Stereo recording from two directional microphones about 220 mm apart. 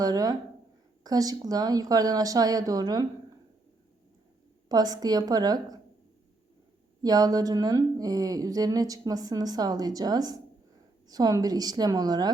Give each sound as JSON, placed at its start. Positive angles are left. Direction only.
{"t": 0.0, "sound": "a woman's voice", "side_deg": -15}
{"t": 4.7, "sound": "a woman's voice", "side_deg": -15}
{"t": 7.0, "sound": "a woman's voice", "side_deg": -15}